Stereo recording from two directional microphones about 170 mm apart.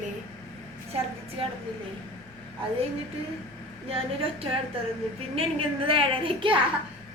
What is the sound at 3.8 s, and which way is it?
A woman's voice, 35° right (ahead or behind).